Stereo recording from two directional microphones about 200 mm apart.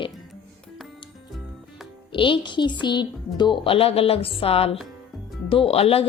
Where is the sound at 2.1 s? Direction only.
25° left (ahead or behind).